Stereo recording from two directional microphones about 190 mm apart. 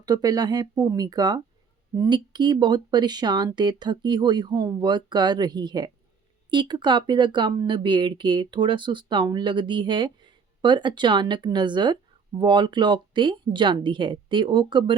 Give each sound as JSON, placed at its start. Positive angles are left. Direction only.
{"t": 0.0, "sound": "speech", "side_deg": -20}